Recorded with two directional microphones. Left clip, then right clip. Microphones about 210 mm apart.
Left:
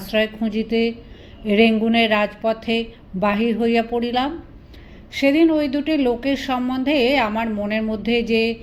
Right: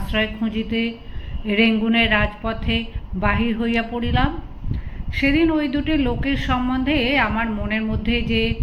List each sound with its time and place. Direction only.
0.1 s speech: 35° left (ahead or behind)